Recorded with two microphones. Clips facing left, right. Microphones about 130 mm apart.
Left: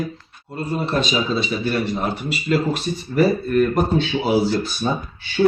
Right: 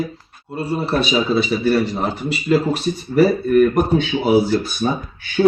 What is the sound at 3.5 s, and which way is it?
Speech, 10° right (ahead or behind).